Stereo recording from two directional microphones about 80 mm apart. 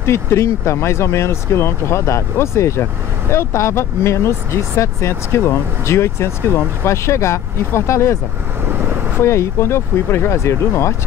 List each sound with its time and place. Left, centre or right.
0.0 s speech: left
9.2 s speech: left